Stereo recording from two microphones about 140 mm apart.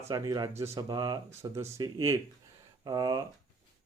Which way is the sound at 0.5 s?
20° right (ahead or behind).